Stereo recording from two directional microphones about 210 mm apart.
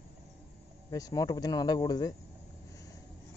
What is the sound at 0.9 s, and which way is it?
Speech, 15° left (ahead or behind).